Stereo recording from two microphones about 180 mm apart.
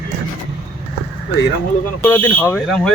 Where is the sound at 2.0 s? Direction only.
10° left (ahead or behind).